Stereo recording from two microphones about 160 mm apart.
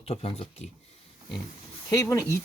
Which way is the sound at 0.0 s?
40° left (ahead or behind).